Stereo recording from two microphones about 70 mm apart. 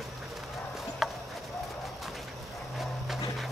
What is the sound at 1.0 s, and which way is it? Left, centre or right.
Horse, centre.